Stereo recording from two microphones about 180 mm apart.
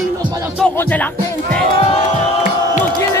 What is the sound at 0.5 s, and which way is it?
Speech, 10° left (ahead or behind).